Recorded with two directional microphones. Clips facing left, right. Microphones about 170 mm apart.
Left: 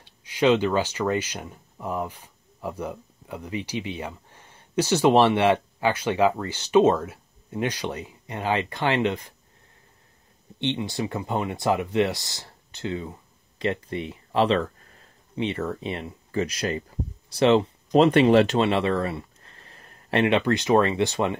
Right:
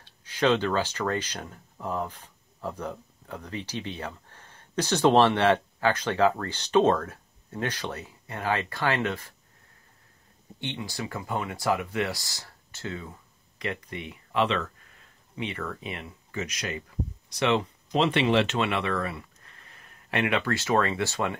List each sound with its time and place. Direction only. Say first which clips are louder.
0.0 s speech: left 4 dB; 10° left (ahead or behind)
10.6 s speech: left 7 dB; 20° left (ahead or behind)
17.9 s speech: left 7 dB; 45° left (ahead or behind); by 21.4 s 20° left (ahead or behind)